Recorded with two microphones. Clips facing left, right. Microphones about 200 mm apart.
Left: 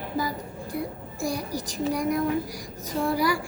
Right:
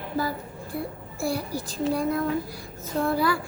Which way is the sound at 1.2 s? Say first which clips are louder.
Right 1 dB; 15° left (ahead or behind).